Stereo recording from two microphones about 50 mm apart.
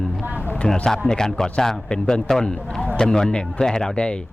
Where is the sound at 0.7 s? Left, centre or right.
Centre.